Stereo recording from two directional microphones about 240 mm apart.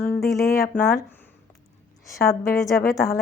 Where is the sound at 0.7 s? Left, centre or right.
Centre.